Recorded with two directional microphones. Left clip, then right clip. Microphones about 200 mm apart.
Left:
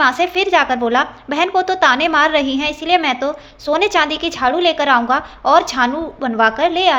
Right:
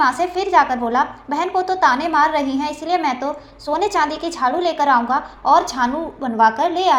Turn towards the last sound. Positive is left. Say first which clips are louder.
# left 2 dB
turn(degrees=20)  # may be behind; listen again after turning